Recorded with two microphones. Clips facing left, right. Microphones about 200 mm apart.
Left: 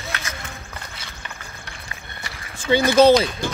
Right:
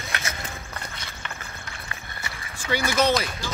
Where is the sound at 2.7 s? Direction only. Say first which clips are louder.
Left 9 dB; 30° left (ahead or behind).